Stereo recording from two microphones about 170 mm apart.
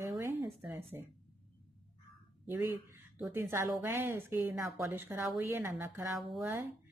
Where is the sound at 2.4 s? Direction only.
15° right (ahead or behind).